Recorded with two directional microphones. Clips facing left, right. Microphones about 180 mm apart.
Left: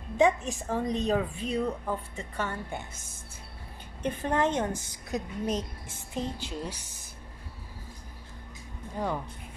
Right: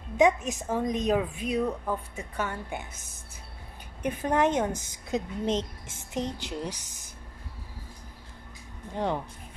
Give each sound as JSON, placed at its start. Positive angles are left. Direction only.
{"t": 0.2, "sound": "a woman's voice", "side_deg": -15}
{"t": 4.0, "sound": "a woman's voice", "side_deg": -15}
{"t": 8.9, "sound": "speech", "side_deg": -25}